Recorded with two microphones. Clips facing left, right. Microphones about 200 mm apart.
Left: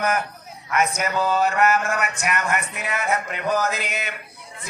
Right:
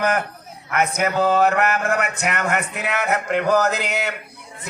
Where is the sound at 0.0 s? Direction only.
60° right (ahead or behind).